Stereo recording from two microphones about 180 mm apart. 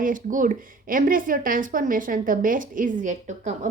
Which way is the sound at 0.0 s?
45° right (ahead or behind).